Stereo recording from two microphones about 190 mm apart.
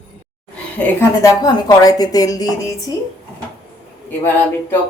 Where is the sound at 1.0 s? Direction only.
15° left (ahead or behind).